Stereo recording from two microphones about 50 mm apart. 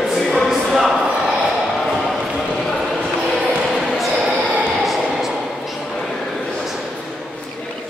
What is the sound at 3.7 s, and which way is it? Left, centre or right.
Music, centre.